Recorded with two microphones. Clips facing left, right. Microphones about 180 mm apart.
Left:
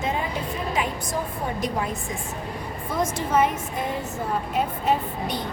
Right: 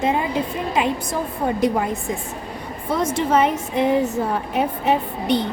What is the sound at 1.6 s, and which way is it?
Speech, 65° right (ahead or behind).